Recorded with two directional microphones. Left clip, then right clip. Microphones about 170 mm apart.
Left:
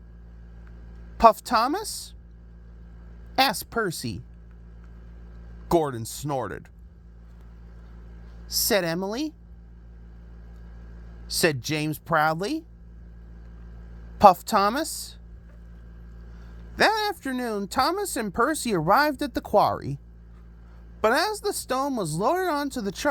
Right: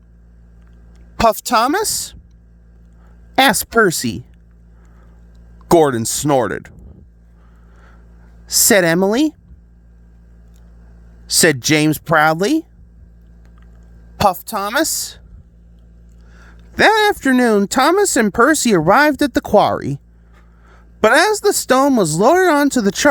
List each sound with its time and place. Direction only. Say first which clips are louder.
1.2 s speech: right 4 dB; 55° right (ahead or behind)
3.3 s speech: right 11 dB; 55° right (ahead or behind)
5.6 s speech: right 12 dB; 60° right (ahead or behind)
8.5 s speech: right 11 dB; 55° right (ahead or behind)
11.3 s speech: right 11 dB; 55° right (ahead or behind)
14.3 s a woman's voice: left 1 dB; centre (ahead or behind)
14.7 s speech: right 11 dB; 55° right (ahead or behind)
16.4 s speech: right 9 dB; 45° right (ahead or behind)
21.0 s speech: right 11 dB; 45° right (ahead or behind)